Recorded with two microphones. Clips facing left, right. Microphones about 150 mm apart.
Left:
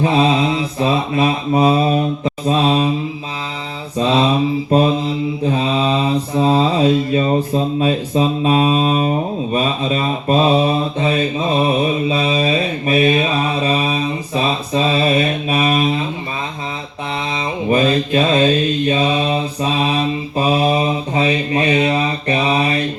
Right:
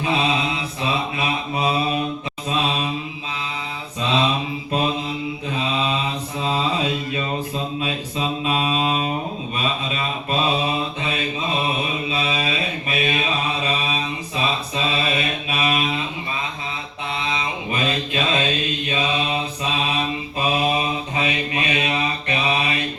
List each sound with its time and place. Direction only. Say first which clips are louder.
0.0 s mantra: left 7 dB; 40° left (ahead or behind)
3.9 s mantra: left 6 dB; 35° left (ahead or behind)
5.5 s mantra: left 6 dB; 40° left (ahead or behind)
17.3 s mantra: left 9 dB; 35° left (ahead or behind)